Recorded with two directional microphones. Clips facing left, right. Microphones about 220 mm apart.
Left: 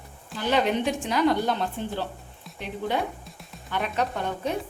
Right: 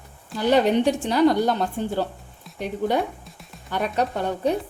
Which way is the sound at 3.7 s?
40° right (ahead or behind).